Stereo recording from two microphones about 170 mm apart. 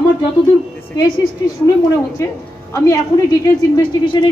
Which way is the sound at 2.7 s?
15° left (ahead or behind).